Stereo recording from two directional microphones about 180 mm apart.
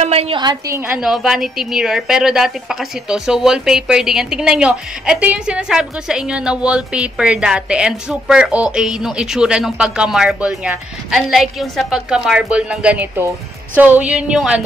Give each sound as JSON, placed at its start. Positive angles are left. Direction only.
{"t": 0.0, "sound": "a woman's voice", "side_deg": -35}
{"t": 0.7, "sound": "a woman's voice", "side_deg": -10}